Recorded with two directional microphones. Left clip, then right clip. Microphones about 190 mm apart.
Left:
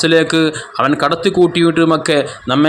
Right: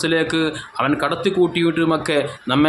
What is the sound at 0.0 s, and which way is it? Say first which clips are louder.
Speech: left 7 dB; 25° left (ahead or behind).